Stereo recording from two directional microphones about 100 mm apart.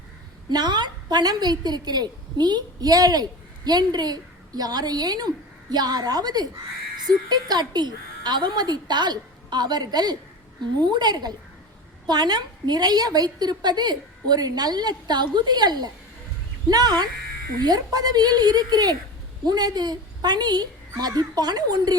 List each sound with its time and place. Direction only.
0.5 s a woman's voice: 45° right (ahead or behind)